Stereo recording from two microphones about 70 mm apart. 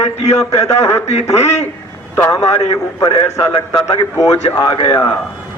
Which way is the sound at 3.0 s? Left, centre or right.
Left.